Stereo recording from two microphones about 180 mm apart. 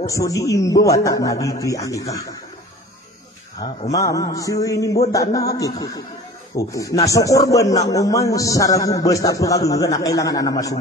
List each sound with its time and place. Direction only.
0.0 s speech: 20° left (ahead or behind)
3.9 s speech: 20° left (ahead or behind)